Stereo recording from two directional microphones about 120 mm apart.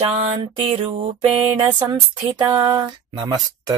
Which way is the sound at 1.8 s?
40° right (ahead or behind).